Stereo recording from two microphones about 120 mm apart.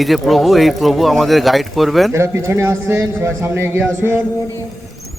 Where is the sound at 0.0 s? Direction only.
Centre (ahead or behind).